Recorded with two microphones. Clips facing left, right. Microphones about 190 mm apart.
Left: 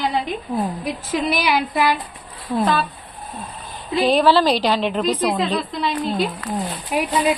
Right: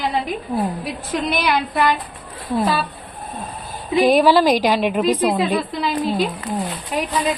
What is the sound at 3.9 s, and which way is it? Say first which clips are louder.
A woman's voice: right 2 dB; 10° right (ahead or behind).